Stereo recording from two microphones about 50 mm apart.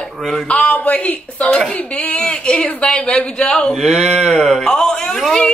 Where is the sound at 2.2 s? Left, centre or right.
Centre.